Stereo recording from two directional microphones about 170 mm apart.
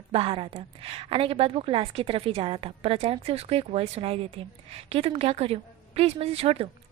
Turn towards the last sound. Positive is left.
turn(degrees=-35)  # may be behind; listen again after turning